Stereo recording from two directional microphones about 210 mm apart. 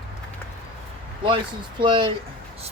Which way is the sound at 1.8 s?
25° right (ahead or behind).